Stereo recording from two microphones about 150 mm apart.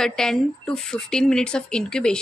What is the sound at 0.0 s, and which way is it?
Speech, 5° left (ahead or behind).